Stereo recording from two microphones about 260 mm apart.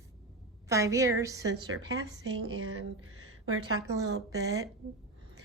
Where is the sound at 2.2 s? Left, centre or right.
Right.